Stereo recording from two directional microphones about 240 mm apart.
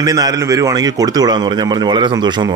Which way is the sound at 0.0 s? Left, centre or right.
Centre.